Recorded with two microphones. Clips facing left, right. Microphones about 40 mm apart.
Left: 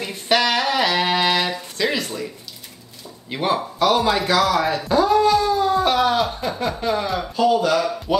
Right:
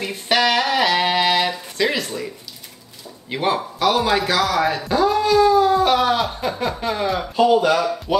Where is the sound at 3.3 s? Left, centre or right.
Centre.